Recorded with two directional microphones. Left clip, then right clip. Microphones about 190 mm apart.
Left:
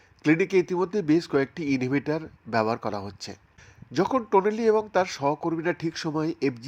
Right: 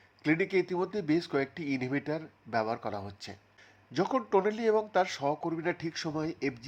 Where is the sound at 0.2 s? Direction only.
20° left (ahead or behind).